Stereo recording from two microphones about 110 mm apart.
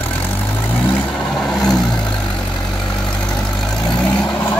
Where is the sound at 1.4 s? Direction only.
10° left (ahead or behind).